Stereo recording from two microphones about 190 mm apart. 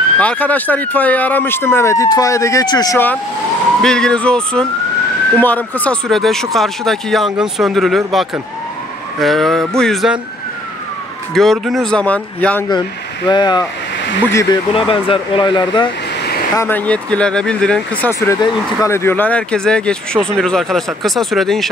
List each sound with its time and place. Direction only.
0.2 s speech: 5° left (ahead or behind)
11.3 s speech: centre (ahead or behind)
13.3 s speech: 25° left (ahead or behind)
14.7 s speech: 25° left (ahead or behind)
16.5 s speech: 10° left (ahead or behind)